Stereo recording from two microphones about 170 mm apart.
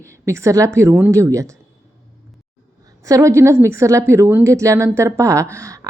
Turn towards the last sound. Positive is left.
turn(degrees=-20)  # may be behind; listen again after turning